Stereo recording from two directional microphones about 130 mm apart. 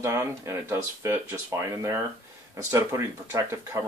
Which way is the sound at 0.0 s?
20° right (ahead or behind).